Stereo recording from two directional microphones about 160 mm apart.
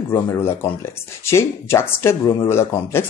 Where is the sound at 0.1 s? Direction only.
15° left (ahead or behind).